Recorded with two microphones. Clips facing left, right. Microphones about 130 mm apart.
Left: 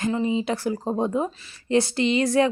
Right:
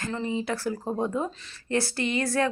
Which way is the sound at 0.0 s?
15° left (ahead or behind).